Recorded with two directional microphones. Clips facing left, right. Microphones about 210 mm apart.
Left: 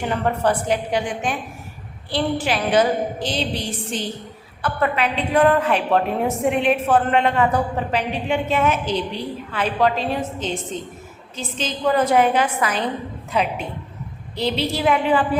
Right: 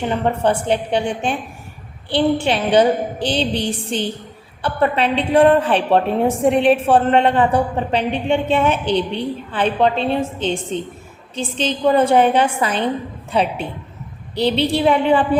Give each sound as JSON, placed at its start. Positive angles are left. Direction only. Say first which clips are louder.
{"t": 0.0, "sound": "a woman's voice", "louder": "right 2 dB", "side_deg": -25}